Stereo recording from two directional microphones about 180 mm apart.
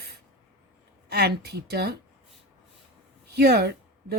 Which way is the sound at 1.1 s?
60° right (ahead or behind).